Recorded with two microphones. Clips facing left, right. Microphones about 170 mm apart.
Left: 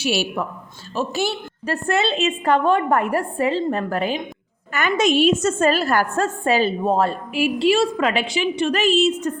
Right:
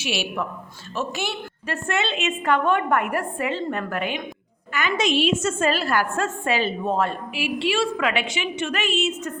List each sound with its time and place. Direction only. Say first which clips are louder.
0.0 s a woman's voice: left 4 dB; 40° left (ahead or behind)
4.7 s a woman's voice: left 4 dB; 50° left (ahead or behind)